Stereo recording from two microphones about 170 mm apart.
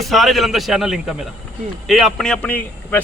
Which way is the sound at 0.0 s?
Centre (ahead or behind).